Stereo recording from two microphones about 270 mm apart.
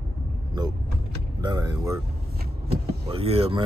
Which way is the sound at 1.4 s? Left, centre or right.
Centre.